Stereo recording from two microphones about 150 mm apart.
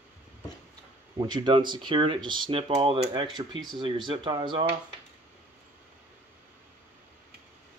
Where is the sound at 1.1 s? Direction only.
25° right (ahead or behind).